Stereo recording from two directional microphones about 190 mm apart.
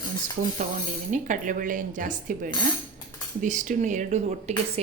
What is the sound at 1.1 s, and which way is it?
Speech, 40° right (ahead or behind).